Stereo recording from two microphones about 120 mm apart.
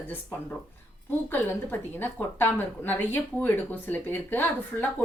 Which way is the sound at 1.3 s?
15° left (ahead or behind).